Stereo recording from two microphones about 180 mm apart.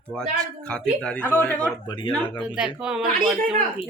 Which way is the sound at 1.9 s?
25° left (ahead or behind).